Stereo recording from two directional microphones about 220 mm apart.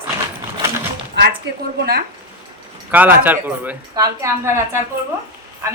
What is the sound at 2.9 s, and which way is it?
Speech, 10° right (ahead or behind).